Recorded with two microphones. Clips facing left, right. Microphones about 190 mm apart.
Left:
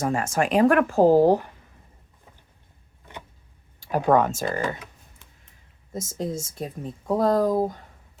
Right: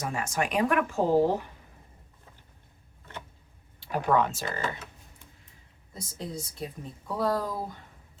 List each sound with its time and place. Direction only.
0.0 s speech: 50° left (ahead or behind)
0.4 s speech: 40° left (ahead or behind)
3.1 s vehicle: 15° left (ahead or behind)
4.1 s speech: 45° left (ahead or behind)
4.4 s speech: 15° left (ahead or behind)
5.9 s speech: 45° left (ahead or behind)